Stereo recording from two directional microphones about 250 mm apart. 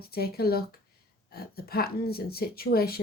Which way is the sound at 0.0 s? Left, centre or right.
Left.